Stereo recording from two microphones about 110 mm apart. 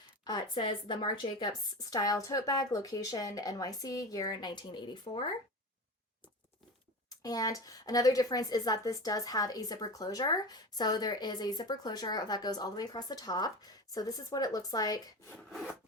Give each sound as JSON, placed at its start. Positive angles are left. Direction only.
{"t": 0.3, "sound": "a woman's voice", "side_deg": 45}
{"t": 7.2, "sound": "a woman's voice", "side_deg": 35}
{"t": 15.4, "sound": "wood", "side_deg": 0}